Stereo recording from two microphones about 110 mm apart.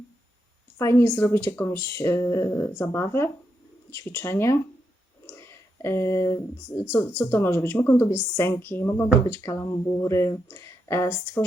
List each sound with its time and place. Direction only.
0.8 s speech: 25° left (ahead or behind)